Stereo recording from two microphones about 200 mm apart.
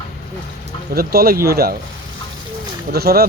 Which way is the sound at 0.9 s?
50° right (ahead or behind).